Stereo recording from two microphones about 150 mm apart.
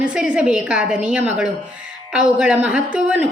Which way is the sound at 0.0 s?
5° right (ahead or behind).